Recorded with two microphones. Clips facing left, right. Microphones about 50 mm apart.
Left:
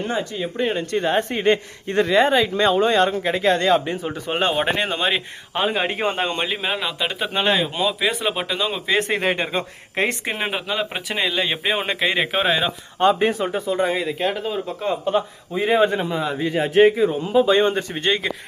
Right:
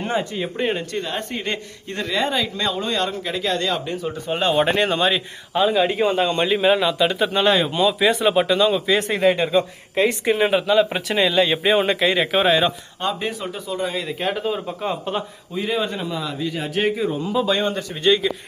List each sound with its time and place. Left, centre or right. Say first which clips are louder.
0.0 s speech: right 1 dB; centre
1.0 s speech: left 8 dB; left
4.5 s speech: right 3 dB; centre
5.1 s a man's voice: right 2 dB; left
6.5 s speech: right 7 dB; centre
7.5 s speech: right 3 dB; centre
8.5 s speech: right 6 dB; centre
8.9 s a man's voice: right 2 dB; left
10.2 s speech: right 7 dB; centre
13.0 s a man's voice: left 8 dB; left
14.2 s speech: even; centre
15.5 s a man's voice: left 6 dB; left
17.9 s a man's voice: right 3 dB; left